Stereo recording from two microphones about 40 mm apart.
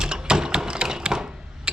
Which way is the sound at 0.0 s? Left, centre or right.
Centre.